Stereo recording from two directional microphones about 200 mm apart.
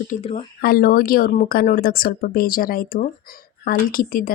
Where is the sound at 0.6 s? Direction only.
50° left (ahead or behind).